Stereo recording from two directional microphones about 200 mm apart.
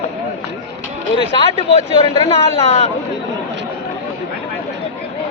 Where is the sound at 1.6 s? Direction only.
25° left (ahead or behind).